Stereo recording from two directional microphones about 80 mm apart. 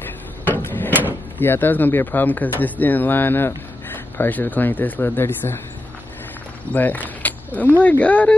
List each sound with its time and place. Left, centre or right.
0.5 s drawer open or close: left
1.4 s speech: left
6.7 s speech: left